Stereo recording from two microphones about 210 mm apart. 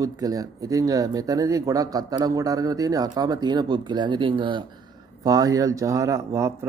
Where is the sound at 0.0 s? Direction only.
15° right (ahead or behind).